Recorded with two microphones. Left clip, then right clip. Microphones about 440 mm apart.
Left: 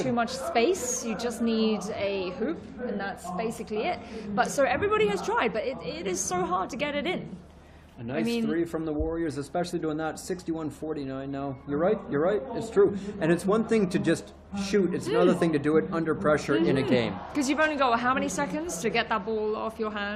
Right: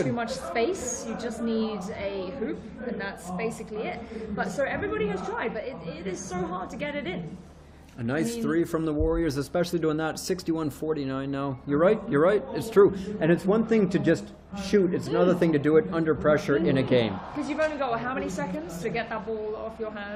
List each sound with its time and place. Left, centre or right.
0.2 s a woman's voice: left
8.0 s speech: right
17.5 s a woman's voice: left